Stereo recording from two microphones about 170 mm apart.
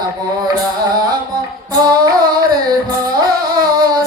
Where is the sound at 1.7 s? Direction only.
25° right (ahead or behind).